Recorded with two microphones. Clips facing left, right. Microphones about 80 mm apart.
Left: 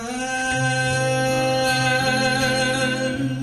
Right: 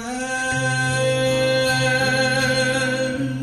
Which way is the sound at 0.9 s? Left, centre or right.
Right.